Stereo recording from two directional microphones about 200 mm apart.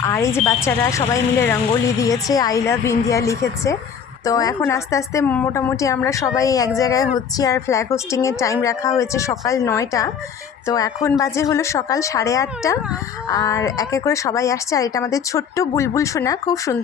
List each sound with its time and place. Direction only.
0.0 s a woman's voice: 15° left (ahead or behind)